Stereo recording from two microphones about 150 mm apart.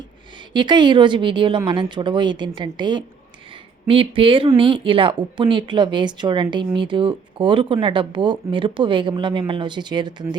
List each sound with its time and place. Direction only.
0.5 s a woman's voice: 30° right (ahead or behind)